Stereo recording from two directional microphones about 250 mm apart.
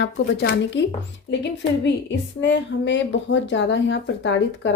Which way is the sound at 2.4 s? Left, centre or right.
Left.